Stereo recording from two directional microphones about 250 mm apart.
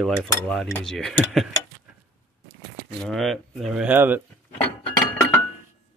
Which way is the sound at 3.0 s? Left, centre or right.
Centre.